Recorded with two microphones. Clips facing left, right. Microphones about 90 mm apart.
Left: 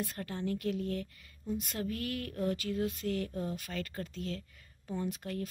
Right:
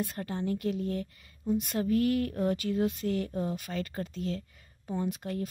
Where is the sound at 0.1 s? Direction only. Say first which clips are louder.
Right 4 dB; 25° right (ahead or behind).